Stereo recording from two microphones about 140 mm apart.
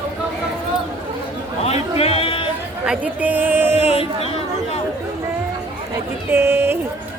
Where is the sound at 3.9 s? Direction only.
45° left (ahead or behind).